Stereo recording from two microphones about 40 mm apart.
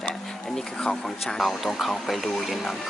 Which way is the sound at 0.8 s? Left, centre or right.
Centre.